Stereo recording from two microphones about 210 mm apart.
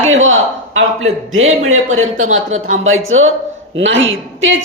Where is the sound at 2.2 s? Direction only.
75° right (ahead or behind).